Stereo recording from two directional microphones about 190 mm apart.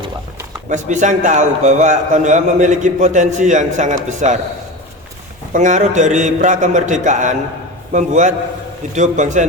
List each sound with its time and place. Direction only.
0.7 s a man's voice: 40° right (ahead or behind)
5.5 s a man's voice: 40° right (ahead or behind)